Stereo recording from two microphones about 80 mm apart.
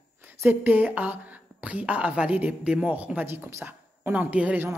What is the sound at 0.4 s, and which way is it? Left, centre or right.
A woman's voice, right.